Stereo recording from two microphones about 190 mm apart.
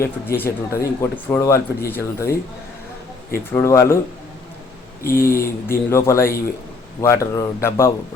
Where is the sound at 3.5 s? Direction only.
15° left (ahead or behind).